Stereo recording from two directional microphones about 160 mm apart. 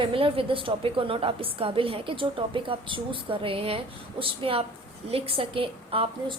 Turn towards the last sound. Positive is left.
turn(degrees=-35)  # may be behind; listen again after turning